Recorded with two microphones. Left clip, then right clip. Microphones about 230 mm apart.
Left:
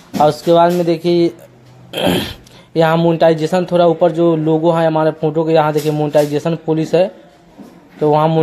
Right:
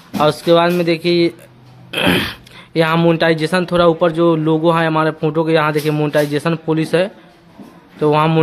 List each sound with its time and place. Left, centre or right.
0.2 s speech: centre
8.1 s a man's voice: centre